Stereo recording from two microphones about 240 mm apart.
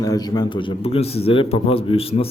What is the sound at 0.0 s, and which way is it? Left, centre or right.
A man's voice, centre.